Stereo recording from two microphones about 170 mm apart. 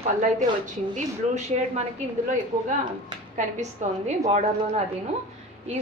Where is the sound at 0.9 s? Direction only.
45° right (ahead or behind).